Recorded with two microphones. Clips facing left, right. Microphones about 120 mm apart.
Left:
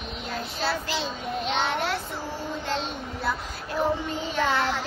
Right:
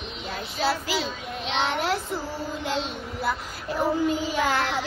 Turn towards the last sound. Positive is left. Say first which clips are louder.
# right 2 dB
turn(degrees=-5)  # may be behind; listen again after turning